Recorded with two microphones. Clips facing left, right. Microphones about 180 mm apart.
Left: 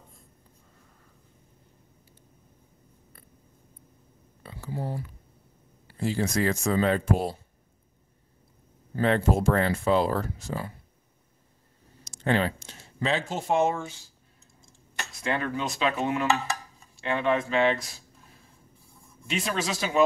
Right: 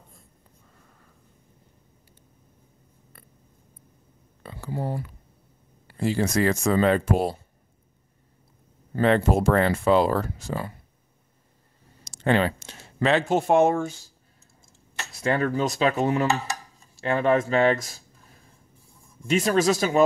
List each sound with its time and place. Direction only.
4.4 s speech: 60° right (ahead or behind)
8.9 s speech: 75° right (ahead or behind)
12.0 s speech: 85° right; by 14.0 s 45° right (ahead or behind)
15.2 s dishes: 40° right (ahead or behind)
16.9 s speech: 40° right (ahead or behind)
19.2 s speech: 45° right (ahead or behind)